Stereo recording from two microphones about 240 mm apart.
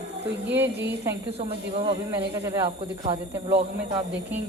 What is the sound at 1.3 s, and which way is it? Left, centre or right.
Speech, right.